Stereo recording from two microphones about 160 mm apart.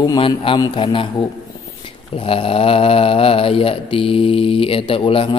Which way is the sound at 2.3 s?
35° left (ahead or behind).